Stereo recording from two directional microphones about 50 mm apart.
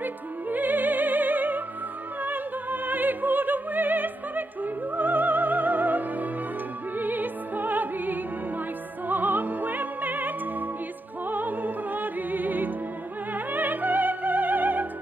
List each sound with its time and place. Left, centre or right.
0.0 s music: right
2.2 s opera: right
4.9 s music: right